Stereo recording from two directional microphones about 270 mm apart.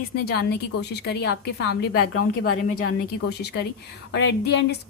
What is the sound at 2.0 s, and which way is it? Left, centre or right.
Speech, left.